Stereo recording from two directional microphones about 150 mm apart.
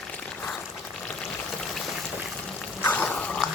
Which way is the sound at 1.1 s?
Centre (ahead or behind).